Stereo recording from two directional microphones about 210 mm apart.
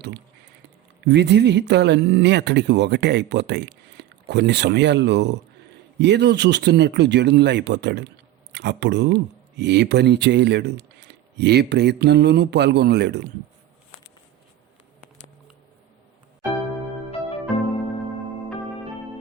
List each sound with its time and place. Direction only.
1.0 s speech: 55° right (ahead or behind)